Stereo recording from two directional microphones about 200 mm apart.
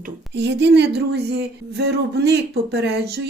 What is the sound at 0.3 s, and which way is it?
Speech, 60° right (ahead or behind).